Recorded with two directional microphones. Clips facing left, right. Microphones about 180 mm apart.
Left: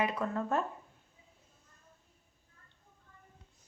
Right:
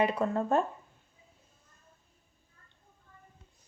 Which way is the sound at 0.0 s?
30° right (ahead or behind).